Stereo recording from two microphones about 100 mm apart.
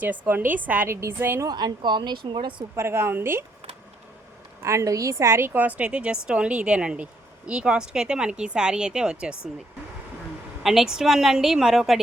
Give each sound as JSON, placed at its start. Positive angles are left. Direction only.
{"t": 0.0, "sound": "a woman's voice", "side_deg": -15}
{"t": 1.5, "sound": "speech", "side_deg": -45}
{"t": 2.7, "sound": "a woman's voice", "side_deg": -25}
{"t": 4.6, "sound": "a woman's voice", "side_deg": -30}
{"t": 10.6, "sound": "a woman's voice", "side_deg": -5}